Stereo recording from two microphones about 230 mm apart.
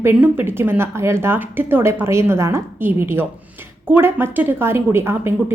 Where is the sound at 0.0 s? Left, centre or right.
Centre.